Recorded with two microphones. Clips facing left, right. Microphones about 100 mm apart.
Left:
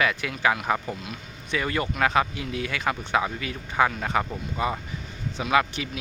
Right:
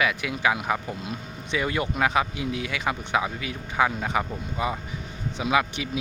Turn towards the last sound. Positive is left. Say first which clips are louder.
# left 1 dB
turn(degrees=-15)  # may be behind; listen again after turning